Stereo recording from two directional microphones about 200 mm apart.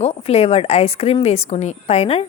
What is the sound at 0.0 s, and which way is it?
A woman's voice, 30° left (ahead or behind).